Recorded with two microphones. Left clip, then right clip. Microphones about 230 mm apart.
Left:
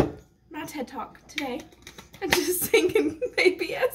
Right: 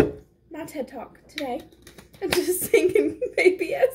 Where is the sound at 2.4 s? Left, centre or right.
Centre.